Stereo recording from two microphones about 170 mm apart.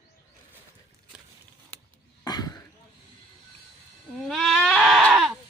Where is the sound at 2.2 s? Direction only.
25° left (ahead or behind).